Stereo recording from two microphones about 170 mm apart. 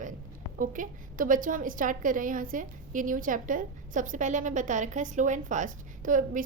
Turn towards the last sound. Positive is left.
turn(degrees=-55)  # may be behind; listen again after turning